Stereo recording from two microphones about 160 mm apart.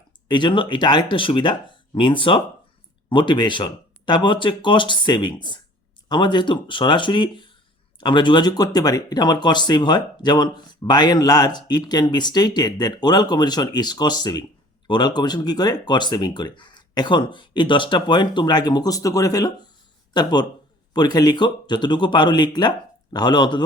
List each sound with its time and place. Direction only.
0.3 s speech: 30° left (ahead or behind)